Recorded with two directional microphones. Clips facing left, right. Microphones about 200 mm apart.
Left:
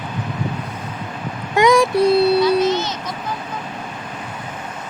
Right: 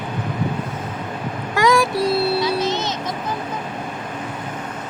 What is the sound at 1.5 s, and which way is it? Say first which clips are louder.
Child singing: left 4 dB; 20° left (ahead or behind).